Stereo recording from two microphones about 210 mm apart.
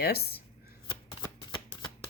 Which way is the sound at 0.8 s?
20° left (ahead or behind).